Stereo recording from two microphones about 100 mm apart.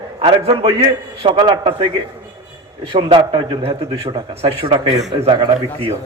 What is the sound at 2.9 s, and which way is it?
Speech, 60° right (ahead or behind).